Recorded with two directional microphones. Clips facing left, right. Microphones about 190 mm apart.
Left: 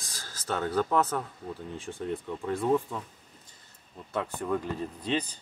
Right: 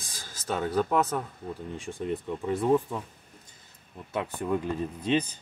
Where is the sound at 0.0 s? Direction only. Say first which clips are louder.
Even; centre (ahead or behind).